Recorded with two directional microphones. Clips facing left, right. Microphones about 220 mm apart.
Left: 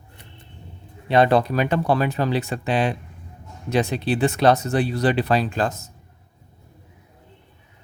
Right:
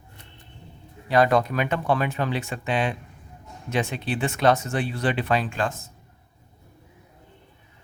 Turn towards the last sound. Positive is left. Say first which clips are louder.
# left 4 dB
turn(degrees=40)  # may be behind; listen again after turning